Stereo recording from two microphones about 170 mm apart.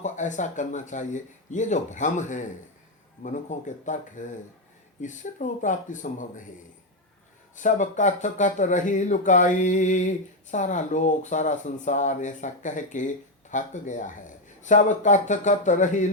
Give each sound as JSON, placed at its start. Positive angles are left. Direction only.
{"t": 0.0, "sound": "speech", "side_deg": 45}
{"t": 7.5, "sound": "speech", "side_deg": 45}